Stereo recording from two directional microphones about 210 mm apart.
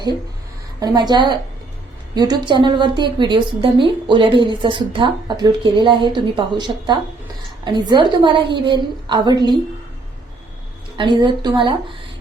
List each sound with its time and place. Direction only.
0.8 s a woman's voice: 20° right (ahead or behind)
10.9 s a woman's voice: 20° right (ahead or behind)